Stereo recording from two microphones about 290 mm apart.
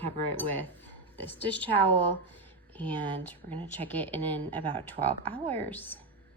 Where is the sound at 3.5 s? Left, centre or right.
Centre.